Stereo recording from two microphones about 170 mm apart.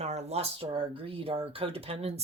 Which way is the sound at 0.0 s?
40° right (ahead or behind).